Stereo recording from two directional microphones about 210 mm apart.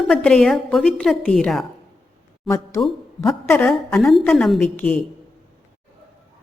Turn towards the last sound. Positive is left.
turn(degrees=5)  # may be behind; listen again after turning